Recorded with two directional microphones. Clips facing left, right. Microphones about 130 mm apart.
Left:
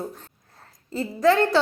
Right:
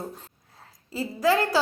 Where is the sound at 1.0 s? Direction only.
5° right (ahead or behind).